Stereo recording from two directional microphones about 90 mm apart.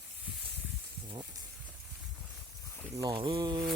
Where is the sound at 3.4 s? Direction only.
45° right (ahead or behind).